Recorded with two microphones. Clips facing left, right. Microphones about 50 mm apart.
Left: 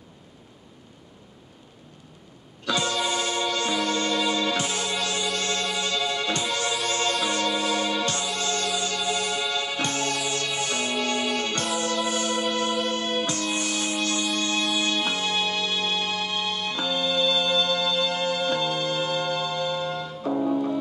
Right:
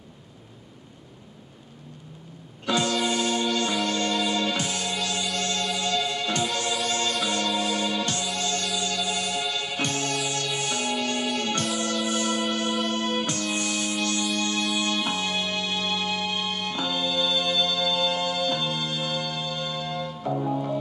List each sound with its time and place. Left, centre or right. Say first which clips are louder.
2.8 s music: right 1 dB; left
16.8 s music: left 3 dB; right
18.4 s music: left 2 dB; left